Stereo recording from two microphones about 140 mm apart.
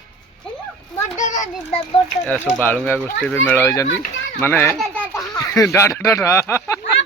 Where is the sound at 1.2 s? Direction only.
60° left (ahead or behind).